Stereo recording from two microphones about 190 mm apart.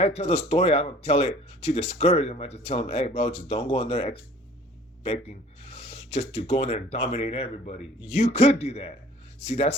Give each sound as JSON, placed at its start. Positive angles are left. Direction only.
{"t": 0.0, "sound": "speech", "side_deg": 30}